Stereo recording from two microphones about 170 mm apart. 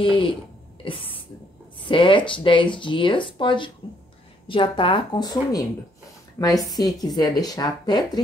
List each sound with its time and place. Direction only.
0.0 s speech: 30° left (ahead or behind)
0.8 s a sound: 30° left (ahead or behind)
1.9 s speech: 30° left (ahead or behind)